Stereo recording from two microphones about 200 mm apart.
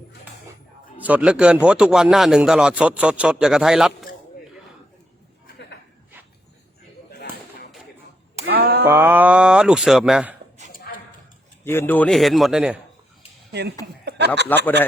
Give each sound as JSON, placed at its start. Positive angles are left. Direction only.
{"t": 0.9, "sound": "a man's voice", "side_deg": -5}
{"t": 7.1, "sound": "a sound", "side_deg": 55}
{"t": 8.4, "sound": "a sound", "side_deg": -50}
{"t": 8.9, "sound": "a man's voice", "side_deg": -10}
{"t": 11.6, "sound": "a man's voice", "side_deg": 10}
{"t": 13.5, "sound": "speech", "side_deg": -55}
{"t": 14.0, "sound": "chuckle", "side_deg": -55}
{"t": 14.4, "sound": "a man's voice", "side_deg": 10}